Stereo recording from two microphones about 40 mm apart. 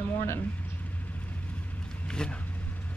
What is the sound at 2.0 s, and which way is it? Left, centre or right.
Vehicle, left.